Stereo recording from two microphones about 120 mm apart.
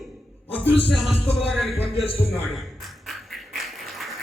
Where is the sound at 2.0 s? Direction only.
55° left (ahead or behind).